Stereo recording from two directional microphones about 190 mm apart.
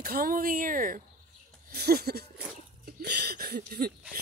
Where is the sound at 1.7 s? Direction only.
55° right (ahead or behind).